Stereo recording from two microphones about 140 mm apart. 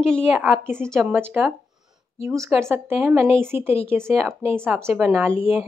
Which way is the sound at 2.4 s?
20° right (ahead or behind).